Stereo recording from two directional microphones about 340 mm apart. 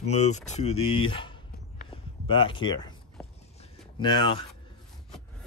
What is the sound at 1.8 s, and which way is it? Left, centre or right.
Walk, centre.